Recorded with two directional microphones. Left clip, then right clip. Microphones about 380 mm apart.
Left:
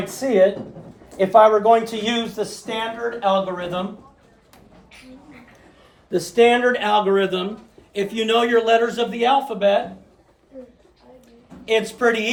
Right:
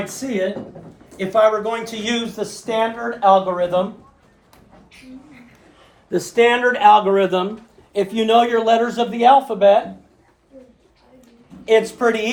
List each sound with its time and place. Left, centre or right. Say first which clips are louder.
1.2 s speech: left 3 dB; centre
6.1 s a man's voice: even; right
11.6 s a man's voice: right 3 dB; centre